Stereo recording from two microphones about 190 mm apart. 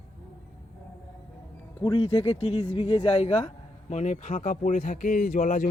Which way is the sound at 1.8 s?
25° left (ahead or behind).